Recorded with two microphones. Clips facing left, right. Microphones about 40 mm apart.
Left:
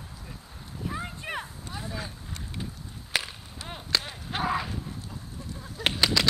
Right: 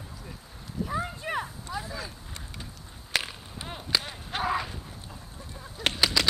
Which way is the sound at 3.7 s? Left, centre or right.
Centre.